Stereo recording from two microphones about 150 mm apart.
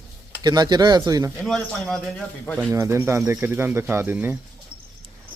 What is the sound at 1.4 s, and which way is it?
A man's voice, 5° left (ahead or behind).